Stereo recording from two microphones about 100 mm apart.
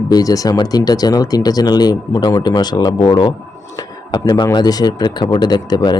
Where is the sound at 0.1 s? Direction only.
35° left (ahead or behind).